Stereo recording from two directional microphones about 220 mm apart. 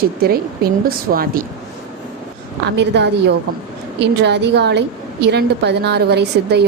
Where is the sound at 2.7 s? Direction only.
50° right (ahead or behind).